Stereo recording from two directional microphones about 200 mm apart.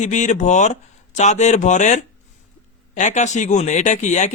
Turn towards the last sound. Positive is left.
turn(degrees=35)  # may be behind; listen again after turning